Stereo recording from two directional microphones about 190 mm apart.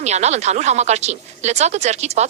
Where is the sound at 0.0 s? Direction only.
35° right (ahead or behind).